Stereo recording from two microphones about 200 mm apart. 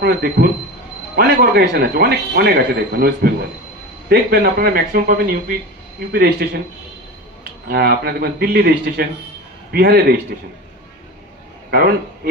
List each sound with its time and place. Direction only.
0.0 s speech: 50° right (ahead or behind)
7.6 s speech: 50° right (ahead or behind)